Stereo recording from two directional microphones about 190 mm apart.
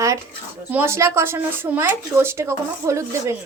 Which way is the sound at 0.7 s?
10° right (ahead or behind).